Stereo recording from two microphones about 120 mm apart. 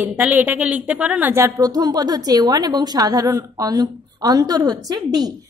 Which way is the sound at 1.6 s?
35° right (ahead or behind).